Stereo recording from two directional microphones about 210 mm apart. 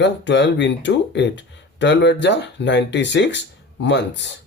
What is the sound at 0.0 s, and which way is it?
Speech, 55° left (ahead or behind).